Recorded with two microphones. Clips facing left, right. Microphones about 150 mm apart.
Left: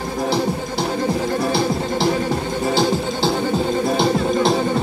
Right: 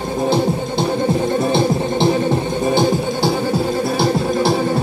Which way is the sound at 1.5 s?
25° right (ahead or behind).